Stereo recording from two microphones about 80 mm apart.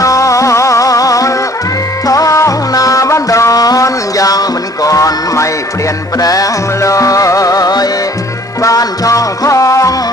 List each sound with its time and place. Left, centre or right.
0.0 s music: left